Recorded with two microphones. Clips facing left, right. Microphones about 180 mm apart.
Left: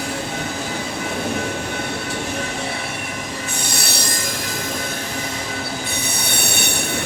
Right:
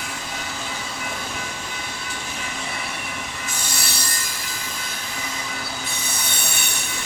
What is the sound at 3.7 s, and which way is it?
Rub, 70° left (ahead or behind).